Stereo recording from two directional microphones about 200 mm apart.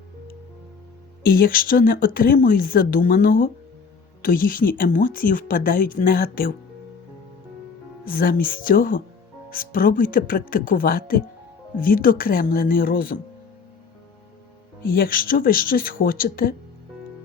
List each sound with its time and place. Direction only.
1.2 s speech: 45° left (ahead or behind)
8.0 s speech: 45° left (ahead or behind)
14.8 s speech: 45° left (ahead or behind)